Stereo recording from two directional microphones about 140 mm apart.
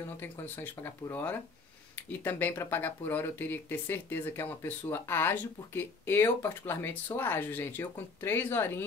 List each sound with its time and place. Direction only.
0.2 s speech: 15° left (ahead or behind)